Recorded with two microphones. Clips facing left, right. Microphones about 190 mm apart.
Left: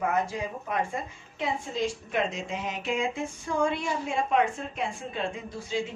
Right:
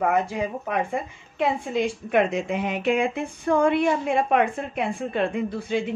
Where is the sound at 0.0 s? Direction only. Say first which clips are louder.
Right 5 dB; 60° right (ahead or behind).